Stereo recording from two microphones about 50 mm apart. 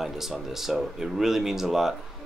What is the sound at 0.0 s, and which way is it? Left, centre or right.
Speech, centre.